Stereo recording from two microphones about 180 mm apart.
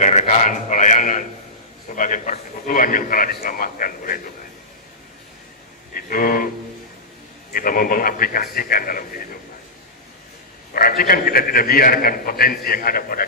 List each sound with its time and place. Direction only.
0.0 s a sound: 40° left (ahead or behind)
1.9 s a man's voice: 45° left (ahead or behind)
5.9 s music: 50° left (ahead or behind)
7.5 s a man's voice: 50° left (ahead or behind)
10.7 s a man's voice: 55° left (ahead or behind)